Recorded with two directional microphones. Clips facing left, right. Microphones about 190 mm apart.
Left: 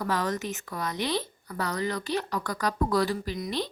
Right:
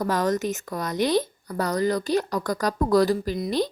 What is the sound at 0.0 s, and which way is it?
Speech, 45° right (ahead or behind).